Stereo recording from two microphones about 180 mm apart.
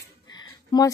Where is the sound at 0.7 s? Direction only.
25° left (ahead or behind).